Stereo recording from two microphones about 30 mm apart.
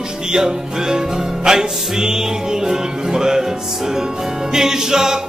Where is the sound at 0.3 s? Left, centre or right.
Centre.